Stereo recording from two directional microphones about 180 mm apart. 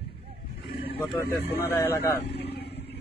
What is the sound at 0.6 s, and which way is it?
Vehicle, 30° left (ahead or behind).